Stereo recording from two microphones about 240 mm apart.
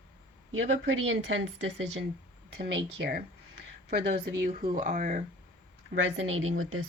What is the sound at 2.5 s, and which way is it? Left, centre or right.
Speech, right.